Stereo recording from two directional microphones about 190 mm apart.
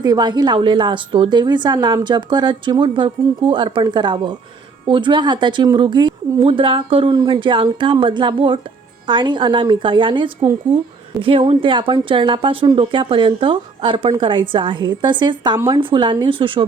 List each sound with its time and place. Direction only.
0.0 s a woman's voice: 20° right (ahead or behind)